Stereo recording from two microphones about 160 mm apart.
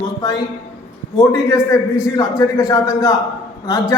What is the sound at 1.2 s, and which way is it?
A man's voice, 20° left (ahead or behind).